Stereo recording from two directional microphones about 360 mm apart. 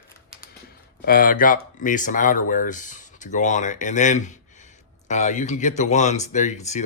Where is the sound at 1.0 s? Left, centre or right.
Left.